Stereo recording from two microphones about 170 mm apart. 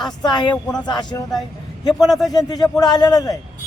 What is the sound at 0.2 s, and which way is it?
Speech, 25° left (ahead or behind).